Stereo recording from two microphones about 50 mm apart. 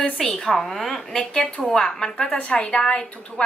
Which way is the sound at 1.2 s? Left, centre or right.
Centre.